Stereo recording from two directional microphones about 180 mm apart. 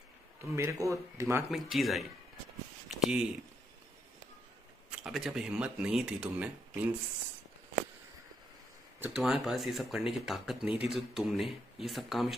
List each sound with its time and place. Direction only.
0.6 s speech: 15° right (ahead or behind)
1.5 s speech: centre (ahead or behind)
4.8 s speech: 5° right (ahead or behind)
9.0 s speech: 5° right (ahead or behind)